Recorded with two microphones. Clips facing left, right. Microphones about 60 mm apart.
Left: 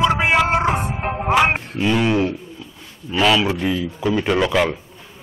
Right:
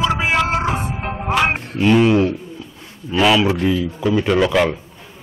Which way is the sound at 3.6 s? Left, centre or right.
Centre.